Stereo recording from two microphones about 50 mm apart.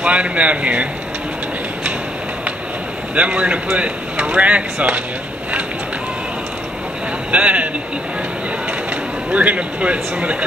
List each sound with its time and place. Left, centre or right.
0.0 s speech: right
3.2 s speech: right
7.2 s speech: right
9.3 s speech: right